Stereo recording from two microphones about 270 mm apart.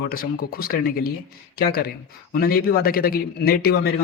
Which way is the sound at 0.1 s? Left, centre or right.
Left.